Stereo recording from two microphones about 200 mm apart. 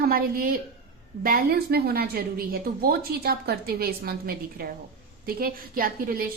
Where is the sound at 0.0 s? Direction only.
45° right (ahead or behind).